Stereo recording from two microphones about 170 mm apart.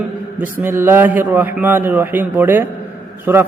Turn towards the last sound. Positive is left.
turn(degrees=-15)  # may be behind; listen again after turning